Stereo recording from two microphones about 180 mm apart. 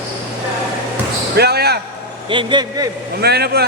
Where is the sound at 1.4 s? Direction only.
65° right (ahead or behind).